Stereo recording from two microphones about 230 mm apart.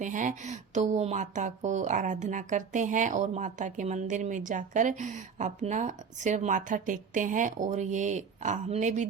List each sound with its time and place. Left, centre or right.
0.0 s speech: right